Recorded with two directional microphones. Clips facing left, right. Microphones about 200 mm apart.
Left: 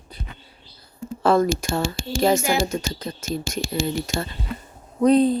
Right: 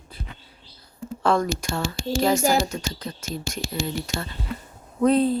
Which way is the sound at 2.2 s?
25° left (ahead or behind).